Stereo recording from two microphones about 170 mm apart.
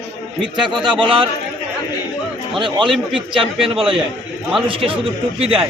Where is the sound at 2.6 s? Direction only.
30° right (ahead or behind).